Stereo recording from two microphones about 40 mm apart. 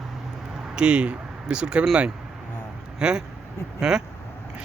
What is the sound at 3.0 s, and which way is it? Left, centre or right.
Speech, right.